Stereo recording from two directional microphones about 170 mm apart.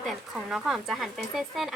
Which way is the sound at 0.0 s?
Centre (ahead or behind).